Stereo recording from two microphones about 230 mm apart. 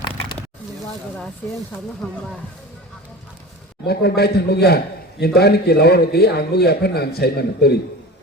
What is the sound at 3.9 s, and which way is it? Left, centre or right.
A man's voice, left.